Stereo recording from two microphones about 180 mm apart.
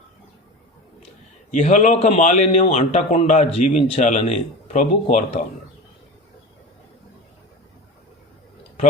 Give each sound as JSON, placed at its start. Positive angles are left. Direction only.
{"t": 1.5, "sound": "a man's voice", "side_deg": 45}